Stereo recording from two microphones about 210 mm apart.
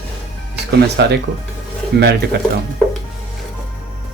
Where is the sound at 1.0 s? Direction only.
55° right (ahead or behind).